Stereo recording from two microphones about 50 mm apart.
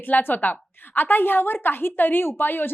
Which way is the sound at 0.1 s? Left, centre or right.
Left.